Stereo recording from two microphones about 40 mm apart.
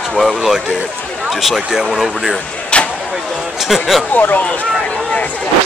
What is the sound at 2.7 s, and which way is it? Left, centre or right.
Vehicle, left.